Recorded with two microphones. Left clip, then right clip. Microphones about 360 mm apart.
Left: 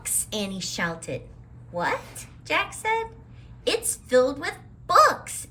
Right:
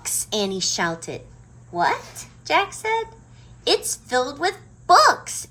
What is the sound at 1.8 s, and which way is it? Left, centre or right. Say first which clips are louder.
A woman's voice: right 5 dB; centre.